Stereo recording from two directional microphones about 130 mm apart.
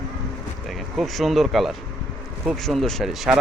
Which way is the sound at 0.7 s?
Centre (ahead or behind).